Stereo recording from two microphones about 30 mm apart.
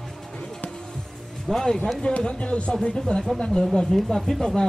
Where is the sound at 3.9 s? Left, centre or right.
Centre.